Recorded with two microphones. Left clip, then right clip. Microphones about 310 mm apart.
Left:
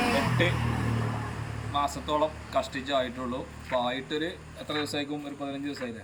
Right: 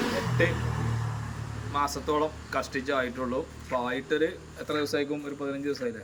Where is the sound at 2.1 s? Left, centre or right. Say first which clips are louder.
Even; centre.